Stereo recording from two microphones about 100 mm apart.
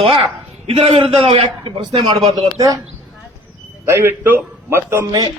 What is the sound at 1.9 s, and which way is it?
Speech, 45° right (ahead or behind).